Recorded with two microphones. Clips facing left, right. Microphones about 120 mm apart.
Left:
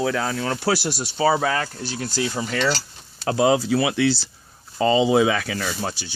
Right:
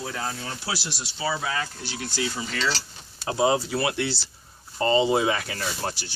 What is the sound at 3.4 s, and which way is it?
Speech, 90° left.